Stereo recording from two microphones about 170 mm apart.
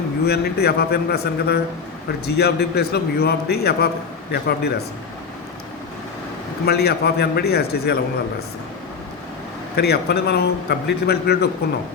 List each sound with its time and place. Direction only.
0.3 s a man's voice: 70° left (ahead or behind)
6.7 s a man's voice: 70° left (ahead or behind)
9.7 s a man's voice: 75° left (ahead or behind)